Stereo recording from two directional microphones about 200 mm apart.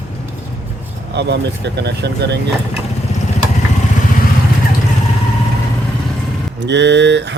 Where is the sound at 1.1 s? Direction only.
55° right (ahead or behind).